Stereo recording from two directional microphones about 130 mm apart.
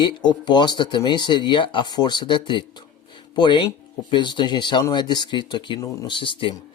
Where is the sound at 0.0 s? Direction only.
35° left (ahead or behind).